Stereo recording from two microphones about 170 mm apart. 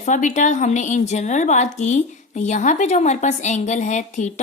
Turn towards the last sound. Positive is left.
turn(degrees=45)  # may be behind; listen again after turning